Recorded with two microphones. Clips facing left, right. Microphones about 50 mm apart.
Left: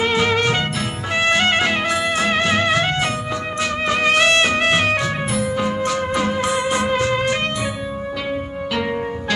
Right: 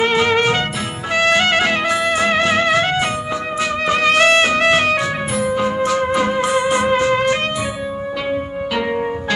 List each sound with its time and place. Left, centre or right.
0.1 s music: centre
1.6 s music: centre
4.2 s music: centre